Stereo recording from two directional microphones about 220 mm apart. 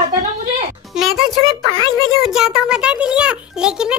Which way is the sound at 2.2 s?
Centre (ahead or behind).